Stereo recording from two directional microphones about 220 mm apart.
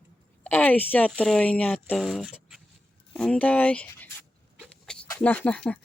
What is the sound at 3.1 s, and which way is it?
Dog, 5° left (ahead or behind).